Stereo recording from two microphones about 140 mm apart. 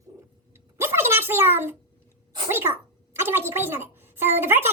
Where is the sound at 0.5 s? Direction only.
15° right (ahead or behind).